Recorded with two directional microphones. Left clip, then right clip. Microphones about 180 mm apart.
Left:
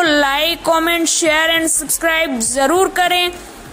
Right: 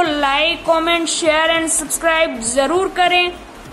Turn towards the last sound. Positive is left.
turn(degrees=40)  # may be behind; listen again after turning